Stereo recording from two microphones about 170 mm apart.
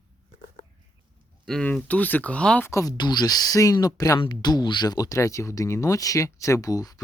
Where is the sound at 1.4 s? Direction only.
5° left (ahead or behind).